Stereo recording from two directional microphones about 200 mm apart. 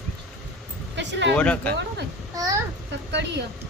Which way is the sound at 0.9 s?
60° right (ahead or behind).